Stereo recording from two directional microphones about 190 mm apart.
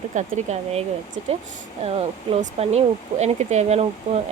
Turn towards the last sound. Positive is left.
turn(degrees=-35)  # may be behind; listen again after turning